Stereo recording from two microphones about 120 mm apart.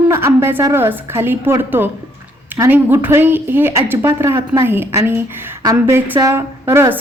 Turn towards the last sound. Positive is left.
turn(degrees=-20)  # may be behind; listen again after turning